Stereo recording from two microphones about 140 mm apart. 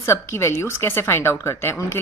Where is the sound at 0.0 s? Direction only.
20° left (ahead or behind).